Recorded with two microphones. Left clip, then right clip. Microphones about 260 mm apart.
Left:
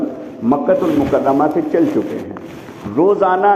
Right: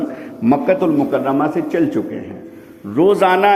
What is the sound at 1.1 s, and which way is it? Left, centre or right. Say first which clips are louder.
Speech: left 3 dB; right.